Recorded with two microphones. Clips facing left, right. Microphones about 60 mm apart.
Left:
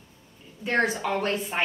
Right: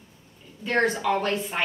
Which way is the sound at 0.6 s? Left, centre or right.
Centre.